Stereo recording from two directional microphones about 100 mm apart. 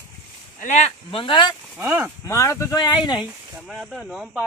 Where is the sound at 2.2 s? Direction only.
30° left (ahead or behind).